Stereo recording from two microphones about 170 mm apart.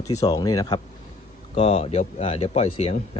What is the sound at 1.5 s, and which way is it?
Speech, 35° left (ahead or behind).